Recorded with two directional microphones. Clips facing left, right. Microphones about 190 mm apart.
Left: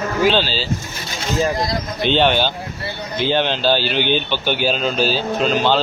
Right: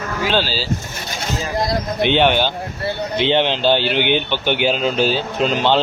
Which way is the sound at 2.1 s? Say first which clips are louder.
Even; 15° right (ahead or behind).